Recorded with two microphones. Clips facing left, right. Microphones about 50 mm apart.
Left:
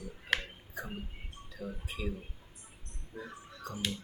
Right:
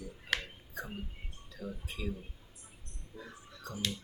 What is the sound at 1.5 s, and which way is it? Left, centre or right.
Speech, centre.